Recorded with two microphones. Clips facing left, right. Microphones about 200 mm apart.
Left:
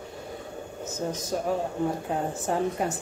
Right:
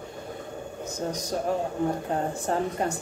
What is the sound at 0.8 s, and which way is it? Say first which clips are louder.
Speech: even; 5° left (ahead or behind).